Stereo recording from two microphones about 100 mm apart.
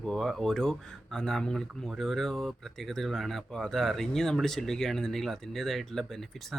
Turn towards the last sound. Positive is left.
turn(degrees=5)  # may be behind; listen again after turning